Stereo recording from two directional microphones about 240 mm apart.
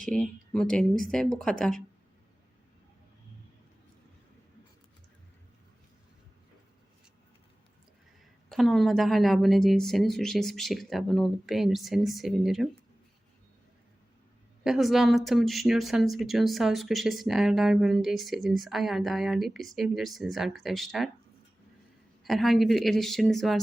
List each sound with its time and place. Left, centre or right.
0.0 s speech: centre
8.4 s speech: centre
14.6 s speech: centre
22.2 s speech: centre